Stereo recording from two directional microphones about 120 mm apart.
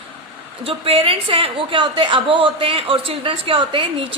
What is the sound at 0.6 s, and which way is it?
A woman's voice, 50° right (ahead or behind).